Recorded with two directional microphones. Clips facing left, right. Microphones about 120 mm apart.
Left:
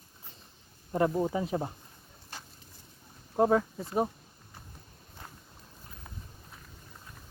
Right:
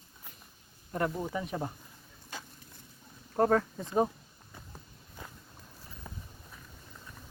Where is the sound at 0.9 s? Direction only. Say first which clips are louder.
Left 5 dB; 25° left (ahead or behind).